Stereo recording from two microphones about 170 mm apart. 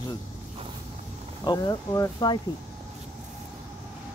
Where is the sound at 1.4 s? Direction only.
25° left (ahead or behind).